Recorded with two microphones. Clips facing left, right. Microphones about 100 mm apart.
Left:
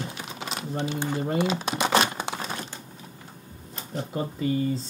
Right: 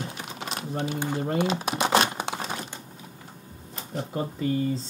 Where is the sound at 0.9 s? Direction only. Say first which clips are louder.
Even; 15° right (ahead or behind).